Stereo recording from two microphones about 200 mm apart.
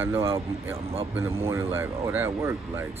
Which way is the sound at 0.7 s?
30° right (ahead or behind).